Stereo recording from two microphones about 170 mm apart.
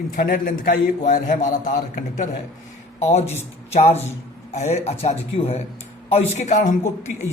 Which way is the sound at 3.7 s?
40° left (ahead or behind).